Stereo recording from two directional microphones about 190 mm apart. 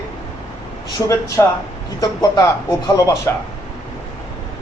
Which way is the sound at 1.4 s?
15° left (ahead or behind).